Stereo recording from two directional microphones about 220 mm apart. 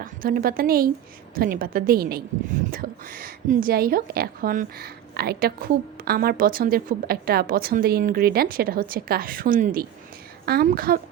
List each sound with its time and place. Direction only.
0.0 s a woman's voice: 40° right (ahead or behind)